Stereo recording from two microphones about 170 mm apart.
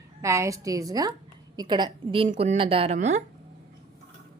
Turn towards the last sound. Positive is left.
turn(degrees=-40)  # may be behind; listen again after turning